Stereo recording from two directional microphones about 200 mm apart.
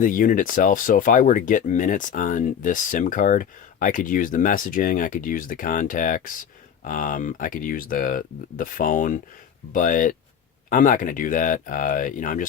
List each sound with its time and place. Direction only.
0.0 s speech: 40° left (ahead or behind)